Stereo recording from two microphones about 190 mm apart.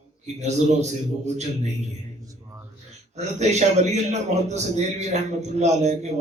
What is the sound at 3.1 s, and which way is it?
A man's voice, 35° right (ahead or behind).